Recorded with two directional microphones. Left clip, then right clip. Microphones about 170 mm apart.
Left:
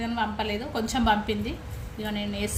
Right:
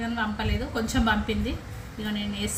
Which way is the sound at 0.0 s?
45° left (ahead or behind).